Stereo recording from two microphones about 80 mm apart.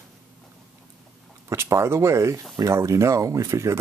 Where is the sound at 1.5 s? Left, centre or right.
Right.